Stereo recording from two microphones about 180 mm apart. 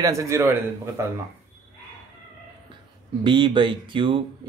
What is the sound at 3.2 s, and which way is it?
Speech, 25° right (ahead or behind).